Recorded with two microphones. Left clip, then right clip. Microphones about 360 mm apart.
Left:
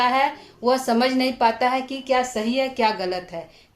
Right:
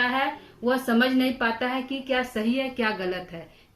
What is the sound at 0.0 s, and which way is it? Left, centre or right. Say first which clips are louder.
Speech: left 5 dB; centre.